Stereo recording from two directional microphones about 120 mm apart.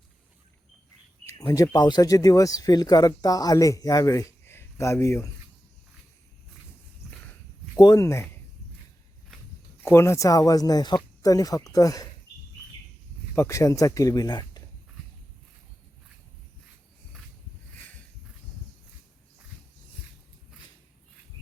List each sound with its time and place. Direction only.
1.5 s speech: 30° left (ahead or behind)
7.8 s speech: 30° left (ahead or behind)
9.8 s speech: 20° left (ahead or behind)
13.3 s speech: 25° left (ahead or behind)
17.7 s a sound: 15° left (ahead or behind)